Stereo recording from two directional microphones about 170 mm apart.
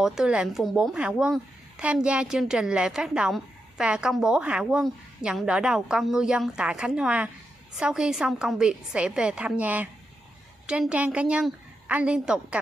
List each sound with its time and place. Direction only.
0.0 s a woman's voice: 5° right (ahead or behind)